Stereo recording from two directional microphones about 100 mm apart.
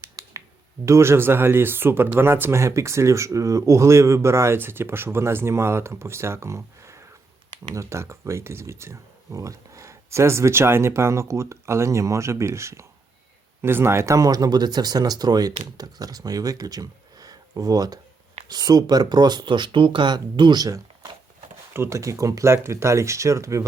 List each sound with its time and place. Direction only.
0.2 s finger snapping: 40° right (ahead or behind)
0.9 s speech: 25° right (ahead or behind)
21.7 s speech: 25° right (ahead or behind)